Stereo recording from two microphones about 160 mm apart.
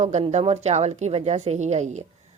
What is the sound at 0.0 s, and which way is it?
Speech, 45° right (ahead or behind).